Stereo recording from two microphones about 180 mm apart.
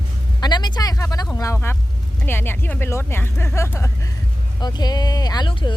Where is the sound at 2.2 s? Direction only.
10° left (ahead or behind).